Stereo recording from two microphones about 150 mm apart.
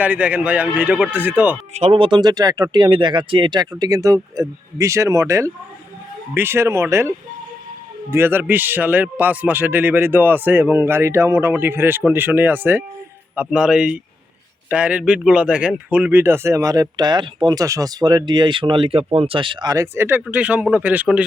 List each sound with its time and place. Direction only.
0.0 s a man's voice: 10° right (ahead or behind)
1.7 s a man's voice: 40° right (ahead or behind); by 7.1 s 15° right (ahead or behind)
8.1 s a man's voice: 15° right (ahead or behind)